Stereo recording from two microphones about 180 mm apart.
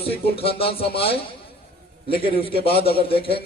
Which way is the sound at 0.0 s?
30° left (ahead or behind).